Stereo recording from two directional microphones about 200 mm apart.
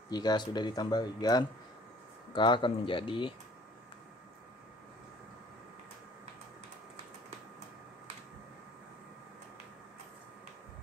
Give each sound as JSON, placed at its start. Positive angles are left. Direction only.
{"t": 0.1, "sound": "speech", "side_deg": 20}